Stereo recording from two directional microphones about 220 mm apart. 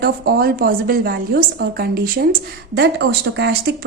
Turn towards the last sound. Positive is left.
turn(degrees=-50)  # may be behind; listen again after turning